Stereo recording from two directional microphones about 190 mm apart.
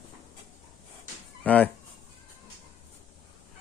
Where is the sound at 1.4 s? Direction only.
5° left (ahead or behind).